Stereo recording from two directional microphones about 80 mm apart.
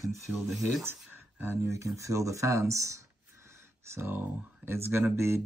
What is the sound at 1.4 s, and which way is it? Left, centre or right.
Speech, right.